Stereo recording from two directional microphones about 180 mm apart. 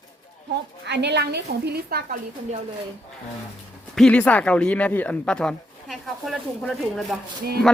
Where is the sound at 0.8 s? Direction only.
70° right (ahead or behind).